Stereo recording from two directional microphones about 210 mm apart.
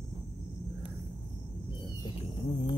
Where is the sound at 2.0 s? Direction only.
20° left (ahead or behind).